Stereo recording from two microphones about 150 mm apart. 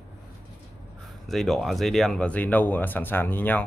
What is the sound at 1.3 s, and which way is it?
Speech, centre (ahead or behind).